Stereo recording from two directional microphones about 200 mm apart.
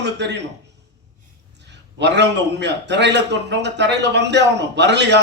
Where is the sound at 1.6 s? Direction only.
60° right (ahead or behind).